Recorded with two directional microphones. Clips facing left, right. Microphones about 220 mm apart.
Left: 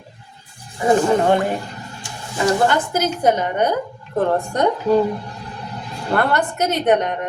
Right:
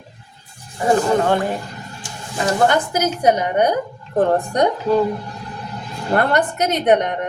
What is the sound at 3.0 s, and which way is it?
Speech, 15° right (ahead or behind).